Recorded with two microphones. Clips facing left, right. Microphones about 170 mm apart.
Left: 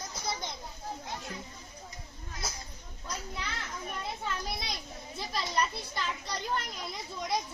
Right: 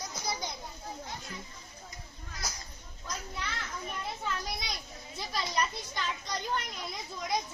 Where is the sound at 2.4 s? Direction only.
25° left (ahead or behind).